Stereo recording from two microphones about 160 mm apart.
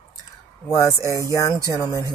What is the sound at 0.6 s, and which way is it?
Speech, 20° left (ahead or behind).